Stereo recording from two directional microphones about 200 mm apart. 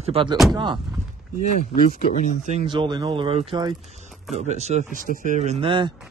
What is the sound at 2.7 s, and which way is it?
Speech, 20° right (ahead or behind).